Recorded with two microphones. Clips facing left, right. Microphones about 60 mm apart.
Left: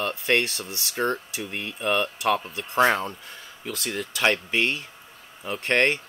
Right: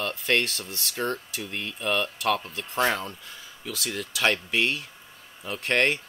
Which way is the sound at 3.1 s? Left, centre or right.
Centre.